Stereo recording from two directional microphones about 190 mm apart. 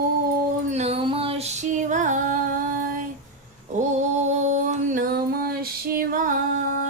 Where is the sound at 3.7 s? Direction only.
40° right (ahead or behind).